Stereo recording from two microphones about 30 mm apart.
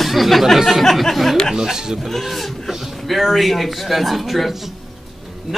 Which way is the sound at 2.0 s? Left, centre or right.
Centre.